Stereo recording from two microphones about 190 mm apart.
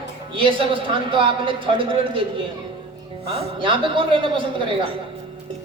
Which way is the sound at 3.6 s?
25° right (ahead or behind).